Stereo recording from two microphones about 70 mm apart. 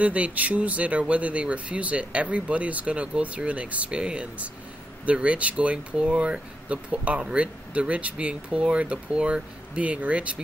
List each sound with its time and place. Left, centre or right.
0.0 s speech: centre